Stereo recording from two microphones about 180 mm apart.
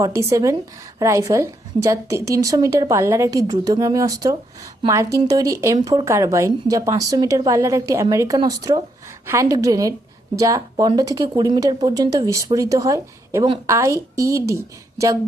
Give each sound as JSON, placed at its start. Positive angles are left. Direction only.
{"t": 0.0, "sound": "a woman's voice", "side_deg": -15}